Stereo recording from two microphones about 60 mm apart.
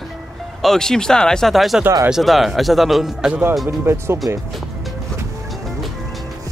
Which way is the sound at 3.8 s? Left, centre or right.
Right.